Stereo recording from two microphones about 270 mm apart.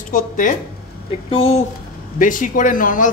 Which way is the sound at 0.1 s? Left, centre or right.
Left.